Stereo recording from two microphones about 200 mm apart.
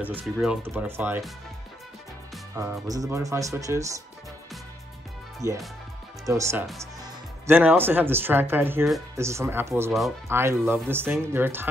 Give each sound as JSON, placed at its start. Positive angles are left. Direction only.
{"t": 0.0, "sound": "speech", "side_deg": -5}
{"t": 2.9, "sound": "speech", "side_deg": -15}
{"t": 5.4, "sound": "speech", "side_deg": 15}
{"t": 6.2, "sound": "speech", "side_deg": -15}